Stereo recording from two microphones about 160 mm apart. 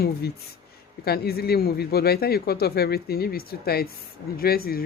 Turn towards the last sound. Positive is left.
turn(degrees=70)  # may be behind; listen again after turning